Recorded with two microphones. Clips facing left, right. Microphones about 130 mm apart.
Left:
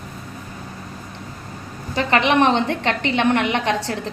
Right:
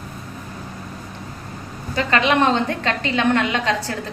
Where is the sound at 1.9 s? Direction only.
20° left (ahead or behind).